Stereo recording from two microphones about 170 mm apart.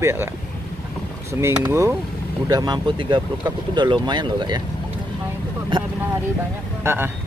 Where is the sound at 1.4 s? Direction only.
15° right (ahead or behind).